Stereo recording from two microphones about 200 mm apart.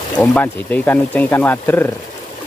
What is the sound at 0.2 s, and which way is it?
Speech, 10° left (ahead or behind).